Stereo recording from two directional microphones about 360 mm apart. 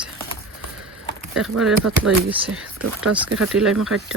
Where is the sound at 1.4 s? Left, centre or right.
Centre.